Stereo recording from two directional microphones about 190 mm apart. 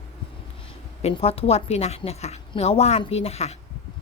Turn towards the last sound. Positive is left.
turn(degrees=35)  # may be behind; listen again after turning